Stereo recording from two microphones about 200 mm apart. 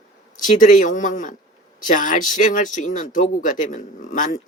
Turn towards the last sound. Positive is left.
turn(degrees=40)  # may be behind; listen again after turning